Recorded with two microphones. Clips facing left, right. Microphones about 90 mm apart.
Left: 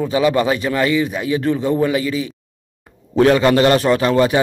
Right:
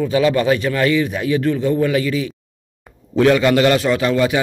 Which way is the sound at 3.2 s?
30° left (ahead or behind).